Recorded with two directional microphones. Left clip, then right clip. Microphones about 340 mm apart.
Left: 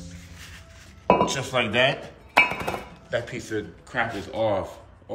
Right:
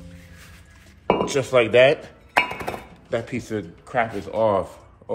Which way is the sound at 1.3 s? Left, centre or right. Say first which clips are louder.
Right 6 dB; centre.